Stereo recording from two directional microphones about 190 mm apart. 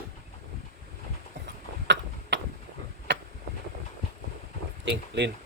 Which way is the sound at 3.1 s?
65° right (ahead or behind).